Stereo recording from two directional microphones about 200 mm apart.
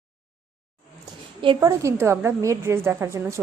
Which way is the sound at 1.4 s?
15° right (ahead or behind).